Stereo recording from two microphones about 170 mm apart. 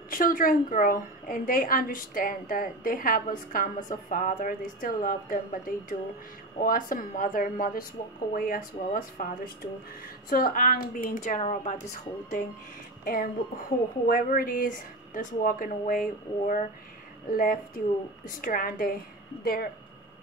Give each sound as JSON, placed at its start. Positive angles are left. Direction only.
{"t": 0.1, "sound": "a woman's voice", "side_deg": 55}
{"t": 13.0, "sound": "a woman's voice", "side_deg": 60}